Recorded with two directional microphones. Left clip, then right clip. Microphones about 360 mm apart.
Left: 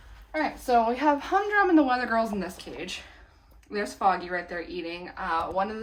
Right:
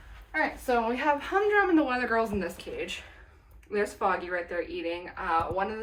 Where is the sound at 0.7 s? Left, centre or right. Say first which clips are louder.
Left 5 dB; left.